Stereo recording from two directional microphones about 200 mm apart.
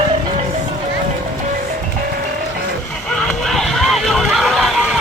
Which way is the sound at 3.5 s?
Centre (ahead or behind).